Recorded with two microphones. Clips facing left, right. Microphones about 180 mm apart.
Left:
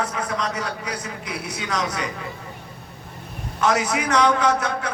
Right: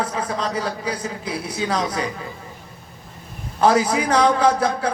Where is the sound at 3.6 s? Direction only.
30° right (ahead or behind).